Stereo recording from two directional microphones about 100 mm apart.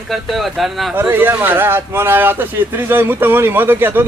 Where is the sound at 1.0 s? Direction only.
20° right (ahead or behind).